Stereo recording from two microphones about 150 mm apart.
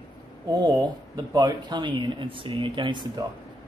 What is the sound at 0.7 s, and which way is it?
Speech, 25° right (ahead or behind).